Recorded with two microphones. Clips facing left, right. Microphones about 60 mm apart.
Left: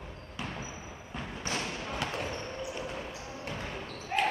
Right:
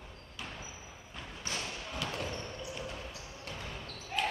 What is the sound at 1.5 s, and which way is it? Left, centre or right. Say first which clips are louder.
Thump: left 4 dB; left.